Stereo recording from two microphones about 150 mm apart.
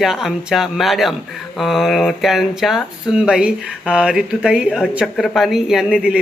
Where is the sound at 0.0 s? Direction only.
Centre (ahead or behind).